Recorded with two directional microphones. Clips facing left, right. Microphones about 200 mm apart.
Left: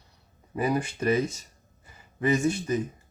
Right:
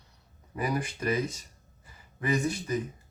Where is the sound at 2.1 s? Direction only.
25° left (ahead or behind).